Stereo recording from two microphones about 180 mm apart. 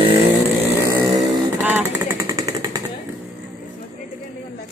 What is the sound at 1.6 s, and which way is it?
Vehicle, 10° right (ahead or behind).